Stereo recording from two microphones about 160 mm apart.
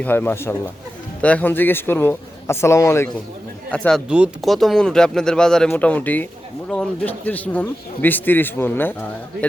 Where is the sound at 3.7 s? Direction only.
5° left (ahead or behind).